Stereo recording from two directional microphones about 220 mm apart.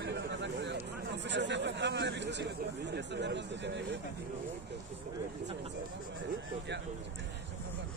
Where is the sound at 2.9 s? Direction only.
50° right (ahead or behind).